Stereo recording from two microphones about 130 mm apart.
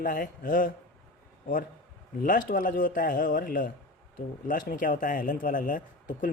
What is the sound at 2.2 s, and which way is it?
Speech, 90° left.